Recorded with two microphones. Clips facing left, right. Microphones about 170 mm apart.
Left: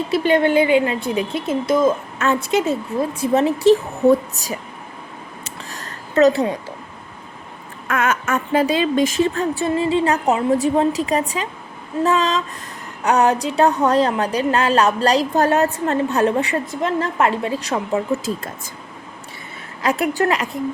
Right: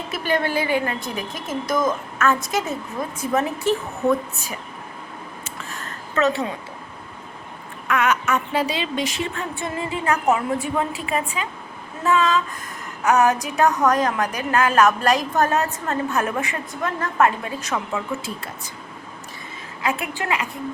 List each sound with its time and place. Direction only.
0.1 s a woman's voice: 25° left (ahead or behind)
5.5 s a sound: 35° left (ahead or behind)
7.9 s speech: 45° left (ahead or behind)
19.8 s a woman's voice: 40° left (ahead or behind)